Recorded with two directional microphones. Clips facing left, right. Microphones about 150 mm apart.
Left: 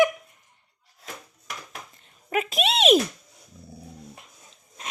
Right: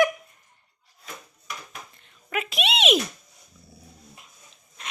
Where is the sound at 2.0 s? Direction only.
35° left (ahead or behind).